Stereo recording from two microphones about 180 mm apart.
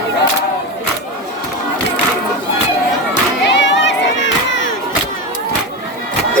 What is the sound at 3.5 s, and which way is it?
Crowd, 80° left.